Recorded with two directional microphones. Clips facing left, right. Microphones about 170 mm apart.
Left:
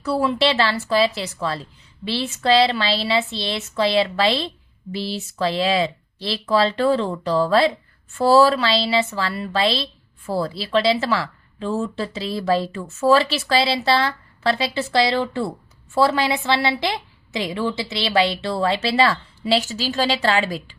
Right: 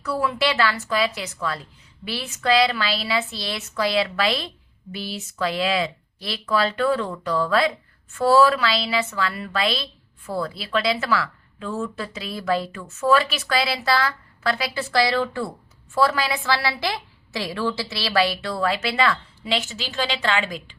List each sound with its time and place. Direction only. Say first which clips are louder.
0.0 s speech: left 4 dB; 30° left (ahead or behind)